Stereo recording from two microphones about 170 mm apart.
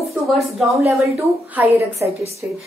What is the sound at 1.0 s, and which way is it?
A woman's voice, 15° right (ahead or behind).